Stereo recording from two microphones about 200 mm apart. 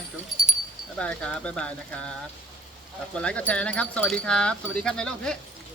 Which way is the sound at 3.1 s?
5° left (ahead or behind).